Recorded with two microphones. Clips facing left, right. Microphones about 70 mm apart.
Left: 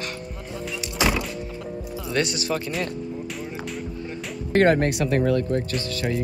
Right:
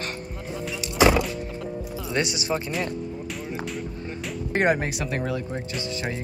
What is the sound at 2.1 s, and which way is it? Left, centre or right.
Speech, centre.